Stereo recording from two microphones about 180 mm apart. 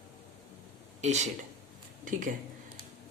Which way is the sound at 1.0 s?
40° right (ahead or behind).